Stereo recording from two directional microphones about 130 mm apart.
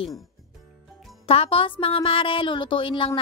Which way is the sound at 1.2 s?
45° left (ahead or behind).